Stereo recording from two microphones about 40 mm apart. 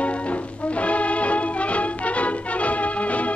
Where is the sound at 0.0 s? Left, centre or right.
Left.